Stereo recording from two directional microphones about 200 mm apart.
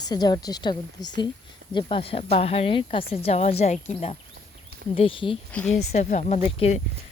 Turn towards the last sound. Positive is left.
turn(degrees=35)  # may be behind; listen again after turning